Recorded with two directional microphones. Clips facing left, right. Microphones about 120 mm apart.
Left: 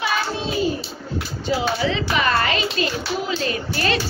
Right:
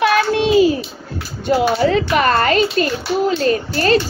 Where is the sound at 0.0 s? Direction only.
80° right.